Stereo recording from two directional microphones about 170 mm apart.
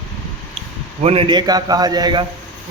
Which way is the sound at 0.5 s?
35° right (ahead or behind).